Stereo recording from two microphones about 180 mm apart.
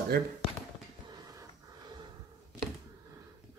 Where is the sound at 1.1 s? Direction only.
20° right (ahead or behind).